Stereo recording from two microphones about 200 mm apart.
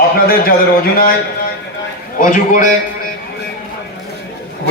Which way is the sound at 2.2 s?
40° left (ahead or behind).